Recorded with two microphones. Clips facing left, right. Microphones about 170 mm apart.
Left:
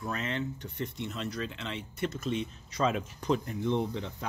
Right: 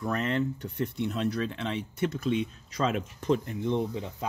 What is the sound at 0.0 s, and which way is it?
Speech, 55° right (ahead or behind).